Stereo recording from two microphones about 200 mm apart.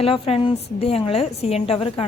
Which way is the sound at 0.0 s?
30° left (ahead or behind).